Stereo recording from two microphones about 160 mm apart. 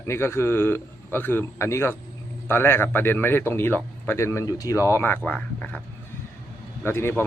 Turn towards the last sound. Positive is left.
turn(degrees=15)  # may be behind; listen again after turning